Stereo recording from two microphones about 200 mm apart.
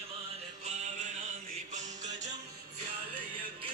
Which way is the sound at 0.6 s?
35° right (ahead or behind).